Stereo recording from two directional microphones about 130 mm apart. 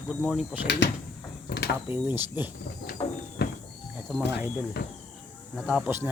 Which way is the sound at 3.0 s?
50° left (ahead or behind).